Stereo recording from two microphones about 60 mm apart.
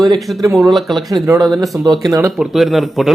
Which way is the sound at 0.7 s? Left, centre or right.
Centre.